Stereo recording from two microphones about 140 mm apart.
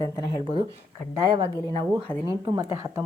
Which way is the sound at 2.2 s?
25° right (ahead or behind).